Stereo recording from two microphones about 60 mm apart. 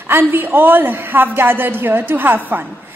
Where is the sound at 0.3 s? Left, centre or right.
Right.